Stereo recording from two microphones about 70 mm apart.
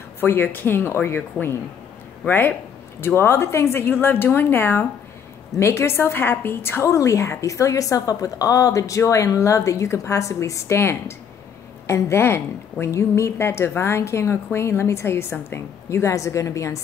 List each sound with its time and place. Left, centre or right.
0.2 s a woman's voice: left
3.2 s a woman's voice: left